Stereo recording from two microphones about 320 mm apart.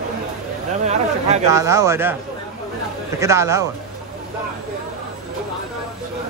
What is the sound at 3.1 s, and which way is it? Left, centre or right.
Speech, centre.